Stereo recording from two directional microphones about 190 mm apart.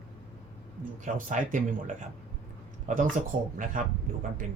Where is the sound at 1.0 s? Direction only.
40° right (ahead or behind).